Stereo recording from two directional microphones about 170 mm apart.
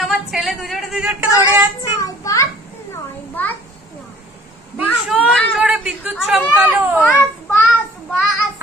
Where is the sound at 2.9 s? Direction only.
10° left (ahead or behind).